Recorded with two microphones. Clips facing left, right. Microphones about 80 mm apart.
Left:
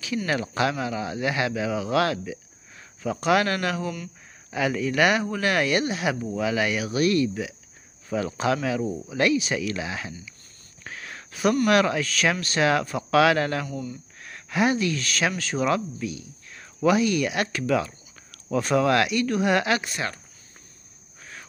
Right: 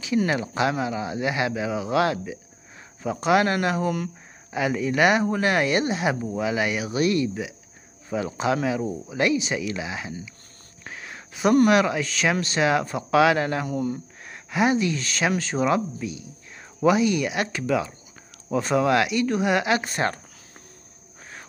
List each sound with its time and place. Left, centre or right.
0.3 s speech: centre
10.8 s whispering: centre
11.6 s speech: centre
13.7 s speech: right
14.2 s speech: centre
19.8 s speech: right